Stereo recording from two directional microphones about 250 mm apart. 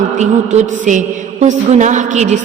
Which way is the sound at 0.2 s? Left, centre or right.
Right.